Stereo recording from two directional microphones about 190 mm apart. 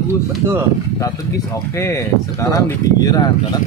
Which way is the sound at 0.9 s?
15° left (ahead or behind).